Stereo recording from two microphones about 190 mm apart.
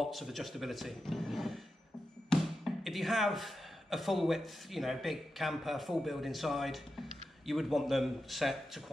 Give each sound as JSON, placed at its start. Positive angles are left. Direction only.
{"t": 0.0, "sound": "speech", "side_deg": 0}